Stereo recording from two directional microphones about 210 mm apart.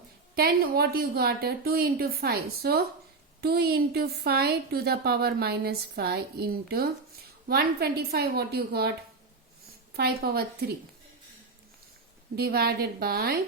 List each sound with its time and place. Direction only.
0.3 s speech: 45° right (ahead or behind)
9.9 s speech: 50° right (ahead or behind)
12.4 s speech: 50° right (ahead or behind)